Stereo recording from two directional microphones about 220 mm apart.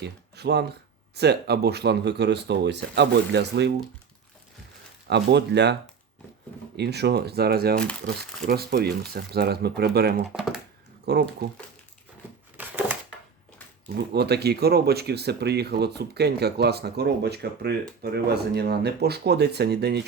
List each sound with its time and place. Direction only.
0.0 s speech: 50° right (ahead or behind)
5.0 s speech: 50° right (ahead or behind)
6.7 s speech: 50° right (ahead or behind)
10.2 s speech: centre (ahead or behind)
11.0 s speech: 50° right (ahead or behind)
12.5 s a sound: 5° right (ahead or behind)
14.1 s speech: 50° right (ahead or behind)